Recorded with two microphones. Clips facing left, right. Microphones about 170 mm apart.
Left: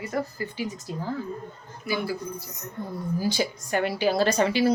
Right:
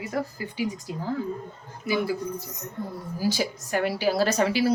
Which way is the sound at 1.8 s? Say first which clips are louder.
Right 3 dB; 20° right (ahead or behind).